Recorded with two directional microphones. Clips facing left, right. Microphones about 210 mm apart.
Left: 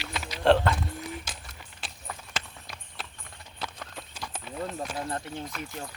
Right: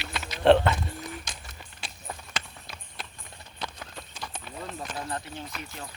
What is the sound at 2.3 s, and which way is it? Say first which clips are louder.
Clip-clop: even; centre (ahead or behind).